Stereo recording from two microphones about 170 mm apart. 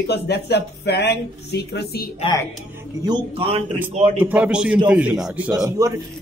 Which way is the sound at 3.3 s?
35° right (ahead or behind).